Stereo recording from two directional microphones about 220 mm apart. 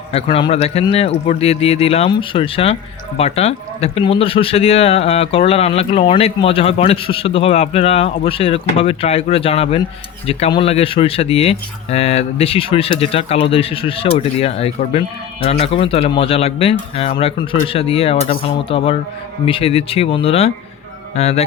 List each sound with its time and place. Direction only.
0.1 s speech: 25° left (ahead or behind)